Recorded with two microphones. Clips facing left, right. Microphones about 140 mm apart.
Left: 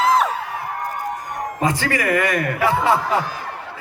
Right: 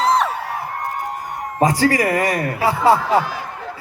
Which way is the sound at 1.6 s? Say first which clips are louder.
Right 5 dB; 35° right (ahead or behind).